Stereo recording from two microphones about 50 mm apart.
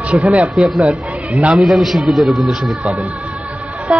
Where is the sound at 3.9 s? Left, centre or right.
Centre.